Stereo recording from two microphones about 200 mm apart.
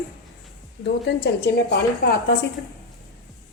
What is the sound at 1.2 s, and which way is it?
Speech, 55° left (ahead or behind).